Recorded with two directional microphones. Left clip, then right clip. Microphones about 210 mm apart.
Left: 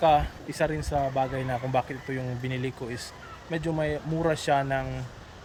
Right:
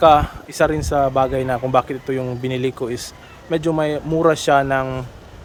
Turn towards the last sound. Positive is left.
turn(degrees=-15)  # may be behind; listen again after turning